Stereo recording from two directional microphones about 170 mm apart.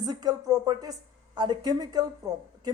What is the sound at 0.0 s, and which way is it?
Speech, 25° right (ahead or behind).